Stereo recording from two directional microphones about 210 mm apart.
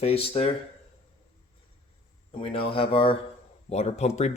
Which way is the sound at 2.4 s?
25° left (ahead or behind).